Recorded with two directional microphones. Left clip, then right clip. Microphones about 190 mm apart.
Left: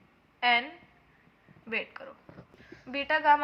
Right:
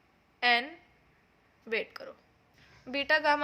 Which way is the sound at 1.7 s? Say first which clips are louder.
Right 1 dB; 50° right (ahead or behind).